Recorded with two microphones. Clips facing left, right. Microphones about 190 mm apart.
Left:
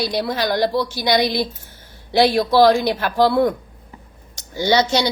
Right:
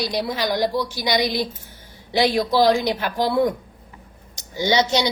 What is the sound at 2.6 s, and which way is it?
A woman's voice, 15° right (ahead or behind).